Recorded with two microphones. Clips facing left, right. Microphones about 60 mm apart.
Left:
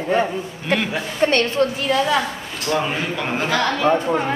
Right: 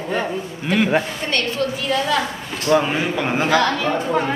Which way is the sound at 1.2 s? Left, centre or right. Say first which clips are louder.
Left 5 dB; left.